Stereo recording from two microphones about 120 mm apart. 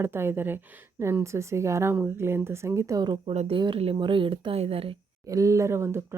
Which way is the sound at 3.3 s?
50° right (ahead or behind).